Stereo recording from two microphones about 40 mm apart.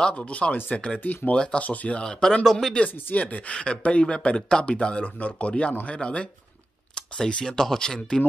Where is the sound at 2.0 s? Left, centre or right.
Centre.